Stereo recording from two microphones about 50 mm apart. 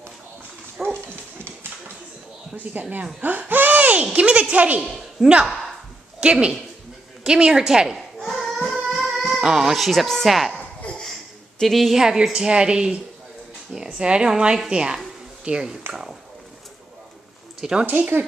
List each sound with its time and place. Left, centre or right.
0.8 s dog: centre
2.5 s speech: right
3.2 s laughter: right
4.0 s speech: right
5.2 s a woman's voice: centre
6.1 s a woman's voice: right
8.6 s music: centre
9.0 s speech: centre
11.6 s a woman's voice: centre
12.0 s a woman's voice: centre
17.6 s speech: centre